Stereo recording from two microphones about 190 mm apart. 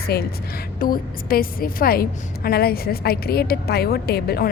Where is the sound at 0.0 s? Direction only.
55° left (ahead or behind).